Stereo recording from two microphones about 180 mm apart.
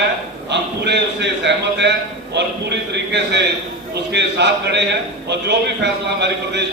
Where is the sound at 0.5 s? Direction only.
75° right (ahead or behind).